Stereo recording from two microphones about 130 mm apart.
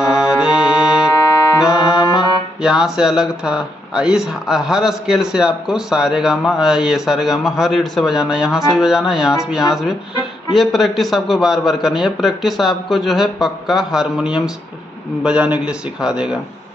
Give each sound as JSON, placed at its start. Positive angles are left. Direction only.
{"t": 0.4, "sound": "music", "side_deg": -5}
{"t": 1.7, "sound": "music", "side_deg": 30}
{"t": 2.6, "sound": "a man's voice", "side_deg": -5}